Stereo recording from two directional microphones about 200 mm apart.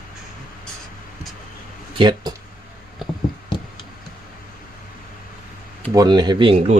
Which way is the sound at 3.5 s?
25° left (ahead or behind).